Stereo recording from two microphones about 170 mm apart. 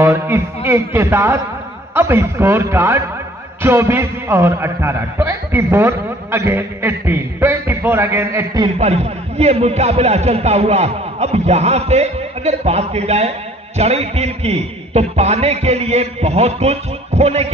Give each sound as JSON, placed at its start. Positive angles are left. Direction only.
{"t": 0.0, "sound": "a man's voice", "side_deg": -15}
{"t": 8.7, "sound": "a man's voice", "side_deg": -40}